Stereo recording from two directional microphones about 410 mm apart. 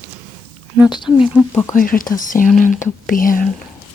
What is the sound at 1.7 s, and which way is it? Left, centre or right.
Speech, centre.